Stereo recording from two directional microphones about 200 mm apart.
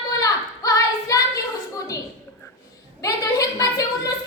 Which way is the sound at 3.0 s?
15° left (ahead or behind).